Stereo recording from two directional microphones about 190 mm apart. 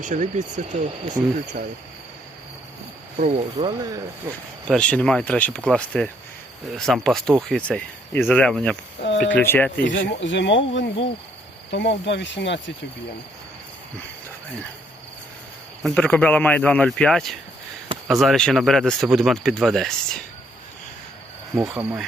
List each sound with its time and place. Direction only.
0.0 s speech: 40° right (ahead or behind)
3.2 s speech: 35° right (ahead or behind)
3.6 s speech: 20° right (ahead or behind)
4.7 s speech: 5° left (ahead or behind)
9.0 s speech: 60° left (ahead or behind)
9.3 s speech: 10° left (ahead or behind)
9.8 s speech: 70° left (ahead or behind)
15.8 s speech: 5° left (ahead or behind)
21.5 s speech: 15° right (ahead or behind)